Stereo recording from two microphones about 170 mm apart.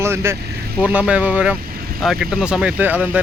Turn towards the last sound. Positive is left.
turn(degrees=-10)  # may be behind; listen again after turning